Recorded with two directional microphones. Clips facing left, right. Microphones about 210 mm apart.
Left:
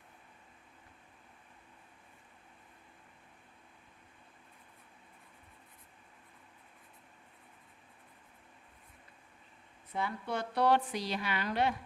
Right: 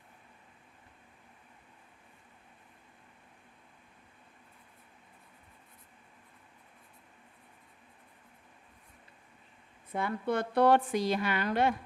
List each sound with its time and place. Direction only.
9.9 s a woman's voice: 55° right (ahead or behind)